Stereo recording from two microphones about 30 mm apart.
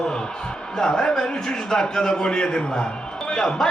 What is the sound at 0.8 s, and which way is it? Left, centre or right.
A man's voice, left.